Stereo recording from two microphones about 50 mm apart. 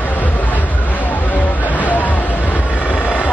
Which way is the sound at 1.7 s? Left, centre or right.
Left.